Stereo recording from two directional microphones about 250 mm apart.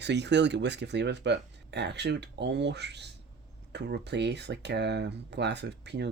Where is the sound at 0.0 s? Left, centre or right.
Right.